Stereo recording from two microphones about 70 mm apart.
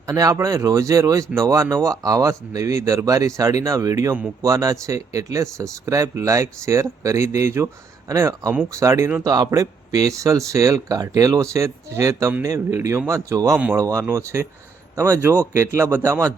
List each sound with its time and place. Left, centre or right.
0.1 s speech: right
9.2 s speech: right
9.5 s speech: right